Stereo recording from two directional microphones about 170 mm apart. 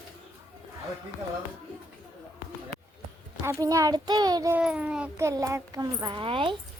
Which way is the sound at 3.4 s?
20° right (ahead or behind).